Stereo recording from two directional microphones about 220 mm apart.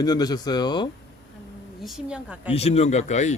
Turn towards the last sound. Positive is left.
turn(degrees=30)  # may be behind; listen again after turning